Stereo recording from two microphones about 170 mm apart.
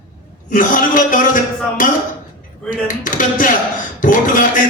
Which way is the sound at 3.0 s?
50° left (ahead or behind).